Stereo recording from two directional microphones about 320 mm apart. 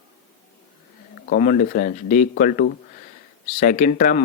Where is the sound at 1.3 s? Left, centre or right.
Left.